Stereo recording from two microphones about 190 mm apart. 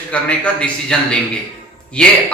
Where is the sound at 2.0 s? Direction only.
5° left (ahead or behind).